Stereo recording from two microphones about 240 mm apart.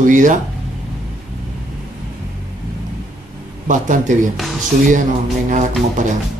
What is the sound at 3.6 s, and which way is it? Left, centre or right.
Speech, right.